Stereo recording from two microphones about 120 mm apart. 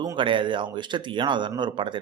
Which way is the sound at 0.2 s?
45° right (ahead or behind).